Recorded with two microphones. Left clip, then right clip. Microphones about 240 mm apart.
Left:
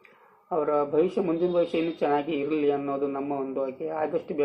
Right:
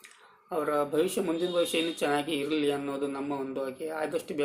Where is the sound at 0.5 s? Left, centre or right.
Right.